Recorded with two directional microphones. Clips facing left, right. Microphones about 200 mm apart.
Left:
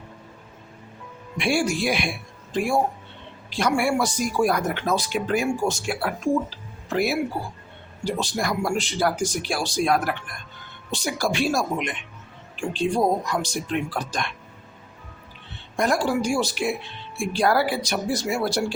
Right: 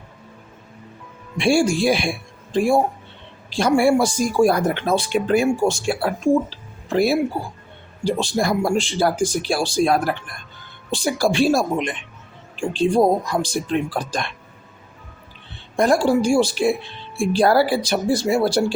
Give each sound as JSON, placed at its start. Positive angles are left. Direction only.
{"t": 1.4, "sound": "a man's voice", "side_deg": -30}
{"t": 15.7, "sound": "speech", "side_deg": -30}